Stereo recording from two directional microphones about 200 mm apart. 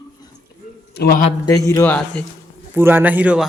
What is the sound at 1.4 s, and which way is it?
Speech, 15° left (ahead or behind).